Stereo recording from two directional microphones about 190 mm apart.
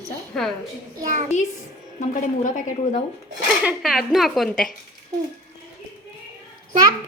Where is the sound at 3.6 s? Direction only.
Centre (ahead or behind).